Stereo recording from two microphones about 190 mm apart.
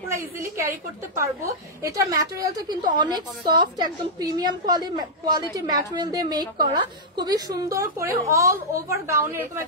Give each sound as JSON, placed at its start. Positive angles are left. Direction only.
{"t": 0.1, "sound": "a woman's voice", "side_deg": -15}